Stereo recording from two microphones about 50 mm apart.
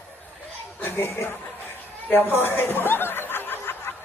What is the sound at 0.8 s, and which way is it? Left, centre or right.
Music, left.